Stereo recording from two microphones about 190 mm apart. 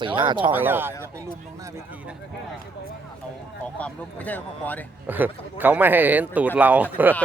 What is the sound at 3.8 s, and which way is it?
Speech, 10° left (ahead or behind).